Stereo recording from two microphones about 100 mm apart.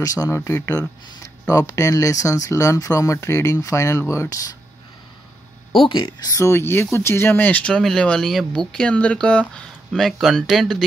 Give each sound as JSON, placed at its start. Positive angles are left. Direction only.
{"t": 0.0, "sound": "speech", "side_deg": 35}
{"t": 0.4, "sound": "speech", "side_deg": 25}
{"t": 5.8, "sound": "speech", "side_deg": 55}
{"t": 7.7, "sound": "speech", "side_deg": 5}